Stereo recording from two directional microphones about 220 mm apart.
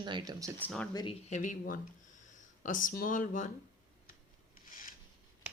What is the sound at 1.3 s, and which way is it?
Speech, 35° left (ahead or behind).